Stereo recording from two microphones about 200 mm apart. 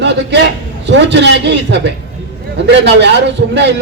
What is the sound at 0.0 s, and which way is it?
A man's voice, 60° right (ahead or behind).